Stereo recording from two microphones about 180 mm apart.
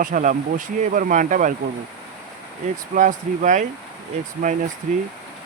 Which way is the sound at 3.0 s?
45° right (ahead or behind).